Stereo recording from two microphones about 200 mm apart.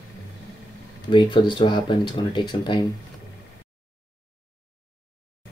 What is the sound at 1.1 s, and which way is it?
Speech, 25° left (ahead or behind).